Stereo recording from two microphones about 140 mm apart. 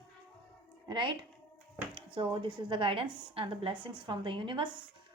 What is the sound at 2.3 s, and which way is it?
A woman's voice, 35° right (ahead or behind).